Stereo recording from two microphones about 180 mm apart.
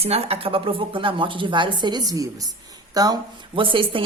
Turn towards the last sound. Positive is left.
turn(degrees=-30)  # may be behind; listen again after turning